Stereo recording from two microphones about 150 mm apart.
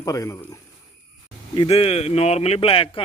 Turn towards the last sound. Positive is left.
turn(degrees=35)  # may be behind; listen again after turning